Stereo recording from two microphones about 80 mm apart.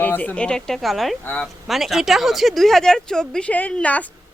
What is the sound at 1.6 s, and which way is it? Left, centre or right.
Speech, centre.